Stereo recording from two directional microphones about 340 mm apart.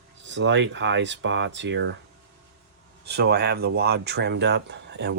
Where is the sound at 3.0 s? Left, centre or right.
Right.